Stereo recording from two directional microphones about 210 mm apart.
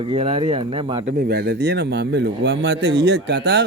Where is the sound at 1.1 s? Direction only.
45° right (ahead or behind).